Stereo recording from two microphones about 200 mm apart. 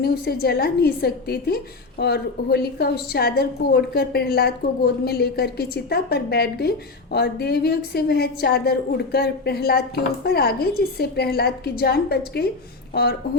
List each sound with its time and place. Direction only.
0.0 s a woman's voice: 55° left (ahead or behind)